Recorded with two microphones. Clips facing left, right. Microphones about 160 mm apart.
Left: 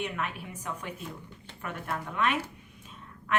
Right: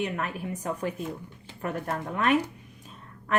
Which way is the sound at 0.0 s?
40° right (ahead or behind).